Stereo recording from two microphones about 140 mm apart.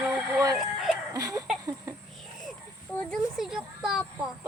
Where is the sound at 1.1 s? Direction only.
25° right (ahead or behind).